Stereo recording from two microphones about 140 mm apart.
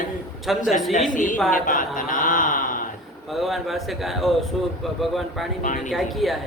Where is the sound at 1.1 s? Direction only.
70° left (ahead or behind).